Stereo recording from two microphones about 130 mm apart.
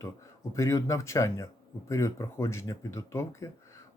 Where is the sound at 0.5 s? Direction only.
25° left (ahead or behind).